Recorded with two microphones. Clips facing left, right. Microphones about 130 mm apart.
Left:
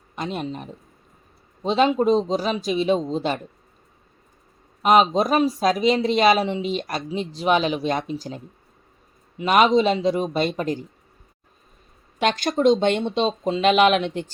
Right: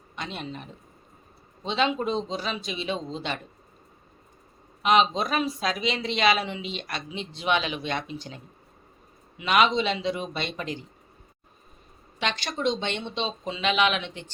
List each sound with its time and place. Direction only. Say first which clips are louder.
0.2 s speech: left 7 dB; 45° left (ahead or behind)
4.8 s speech: left 5 dB; 45° left (ahead or behind)
9.4 s speech: left 6 dB; 45° left (ahead or behind)
12.2 s speech: left 9 dB; 45° left (ahead or behind)